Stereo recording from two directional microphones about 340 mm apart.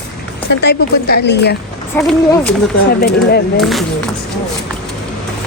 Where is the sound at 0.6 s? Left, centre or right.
Left.